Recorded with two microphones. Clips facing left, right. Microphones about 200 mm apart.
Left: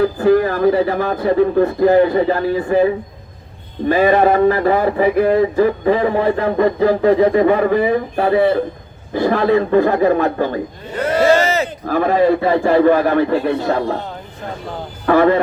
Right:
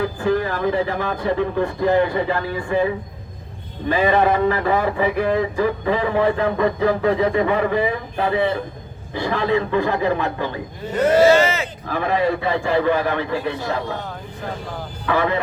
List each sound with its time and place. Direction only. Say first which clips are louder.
0.2 s a sound: left 7 dB; 45° left (ahead or behind)
9.1 s a man's voice: left 6 dB; 45° left (ahead or behind)
15.0 s speech: left 8 dB; 50° left (ahead or behind)